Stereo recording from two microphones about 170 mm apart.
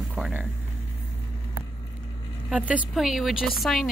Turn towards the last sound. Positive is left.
turn(degrees=0)  # may be behind; listen again after turning